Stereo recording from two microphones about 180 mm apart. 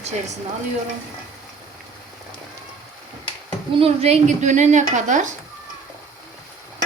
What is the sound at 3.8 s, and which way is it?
A woman's voice, 35° right (ahead or behind).